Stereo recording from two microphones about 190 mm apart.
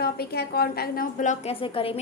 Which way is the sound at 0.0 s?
55° left (ahead or behind).